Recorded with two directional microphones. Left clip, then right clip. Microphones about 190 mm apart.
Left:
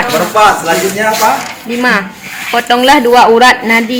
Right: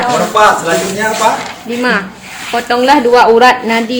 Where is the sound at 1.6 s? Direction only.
45° left (ahead or behind).